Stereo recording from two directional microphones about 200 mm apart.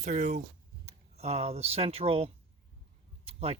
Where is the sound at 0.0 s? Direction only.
35° right (ahead or behind).